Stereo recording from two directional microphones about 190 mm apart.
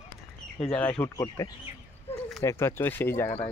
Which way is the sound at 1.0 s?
15° left (ahead or behind).